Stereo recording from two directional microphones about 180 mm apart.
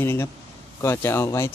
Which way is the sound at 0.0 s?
15° left (ahead or behind).